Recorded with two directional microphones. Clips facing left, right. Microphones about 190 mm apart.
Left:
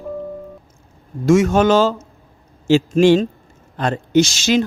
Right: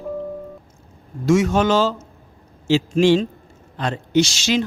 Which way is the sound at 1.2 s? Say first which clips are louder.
Left 3 dB; 50° left (ahead or behind).